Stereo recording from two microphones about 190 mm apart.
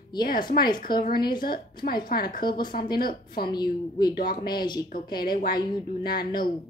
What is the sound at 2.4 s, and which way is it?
A woman's voice, 25° left (ahead or behind).